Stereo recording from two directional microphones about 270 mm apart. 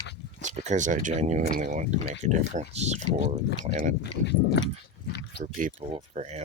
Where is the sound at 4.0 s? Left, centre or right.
Left.